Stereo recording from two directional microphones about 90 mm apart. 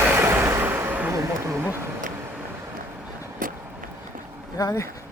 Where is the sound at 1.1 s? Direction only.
35° right (ahead or behind).